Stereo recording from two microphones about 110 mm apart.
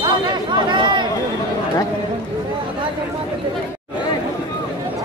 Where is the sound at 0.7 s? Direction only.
45° right (ahead or behind).